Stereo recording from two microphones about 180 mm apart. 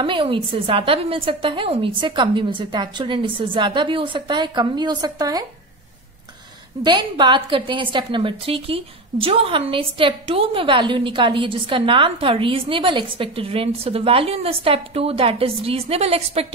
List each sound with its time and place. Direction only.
0.0 s a woman's voice: 30° right (ahead or behind)
6.8 s a woman's voice: 25° right (ahead or behind)